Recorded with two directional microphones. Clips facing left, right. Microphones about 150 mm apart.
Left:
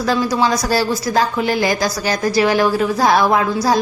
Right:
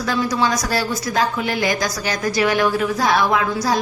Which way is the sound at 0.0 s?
30° left (ahead or behind).